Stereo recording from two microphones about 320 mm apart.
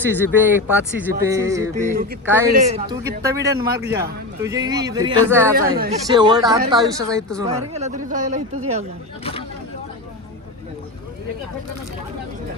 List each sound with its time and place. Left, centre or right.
0.0 s speech: centre
2.6 s speech: centre
5.5 s speech: right
6.1 s speech: centre